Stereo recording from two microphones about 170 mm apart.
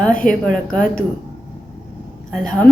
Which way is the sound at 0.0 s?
5° left (ahead or behind).